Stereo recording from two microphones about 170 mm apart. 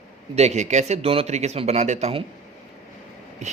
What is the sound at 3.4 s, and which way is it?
Speech, 40° right (ahead or behind).